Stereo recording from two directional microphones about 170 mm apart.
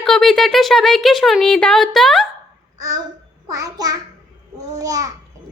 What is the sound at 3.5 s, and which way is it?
Child singing, 20° right (ahead or behind).